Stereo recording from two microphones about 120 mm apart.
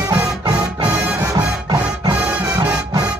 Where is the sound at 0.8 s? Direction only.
10° right (ahead or behind).